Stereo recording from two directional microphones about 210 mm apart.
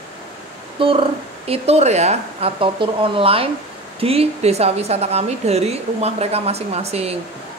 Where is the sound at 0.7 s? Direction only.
25° right (ahead or behind).